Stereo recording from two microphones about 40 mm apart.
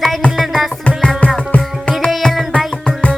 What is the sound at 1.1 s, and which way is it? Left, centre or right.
Music, left.